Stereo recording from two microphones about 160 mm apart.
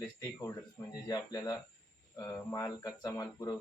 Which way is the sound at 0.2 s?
20° left (ahead or behind).